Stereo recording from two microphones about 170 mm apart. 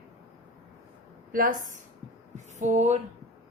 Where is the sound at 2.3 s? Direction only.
45° right (ahead or behind).